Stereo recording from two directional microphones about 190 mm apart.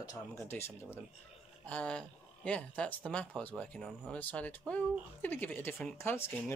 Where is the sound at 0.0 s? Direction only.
15° left (ahead or behind).